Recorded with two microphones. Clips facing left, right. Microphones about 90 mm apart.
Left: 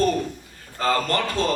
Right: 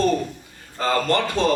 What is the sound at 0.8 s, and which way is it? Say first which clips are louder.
Speech: right 2 dB; 25° right (ahead or behind).